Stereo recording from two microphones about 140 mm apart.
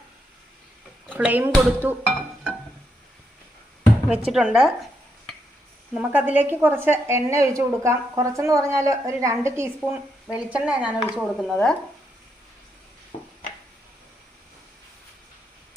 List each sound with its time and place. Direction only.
1.1 s speech: 10° right (ahead or behind)
4.3 s speech: 5° right (ahead or behind)
5.9 s a woman's voice: 10° right (ahead or behind)
10.3 s speech: 10° right (ahead or behind)